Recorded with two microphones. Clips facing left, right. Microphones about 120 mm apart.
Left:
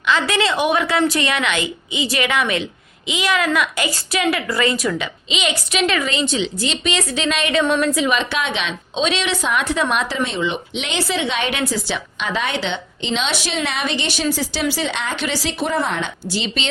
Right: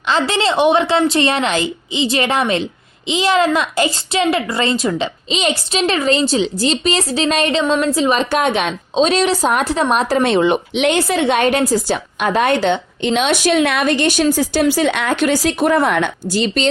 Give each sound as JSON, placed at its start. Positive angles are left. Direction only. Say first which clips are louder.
{"t": 0.1, "sound": "a woman's voice", "louder": "right 2 dB", "side_deg": -30}
{"t": 10.1, "sound": "speech", "louder": "right 8 dB", "side_deg": -60}